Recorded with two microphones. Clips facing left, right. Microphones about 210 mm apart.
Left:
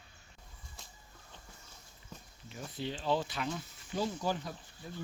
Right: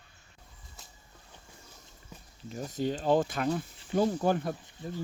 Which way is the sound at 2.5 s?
40° right (ahead or behind).